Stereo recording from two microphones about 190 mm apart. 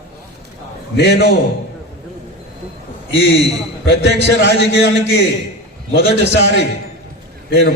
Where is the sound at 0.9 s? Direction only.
60° left (ahead or behind).